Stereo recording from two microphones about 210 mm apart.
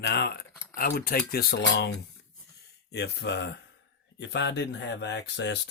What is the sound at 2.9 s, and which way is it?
Speech, 55° left (ahead or behind).